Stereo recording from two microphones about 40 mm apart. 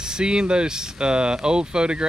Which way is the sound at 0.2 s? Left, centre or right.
Right.